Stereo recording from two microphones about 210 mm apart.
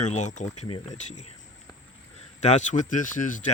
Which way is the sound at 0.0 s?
35° left (ahead or behind).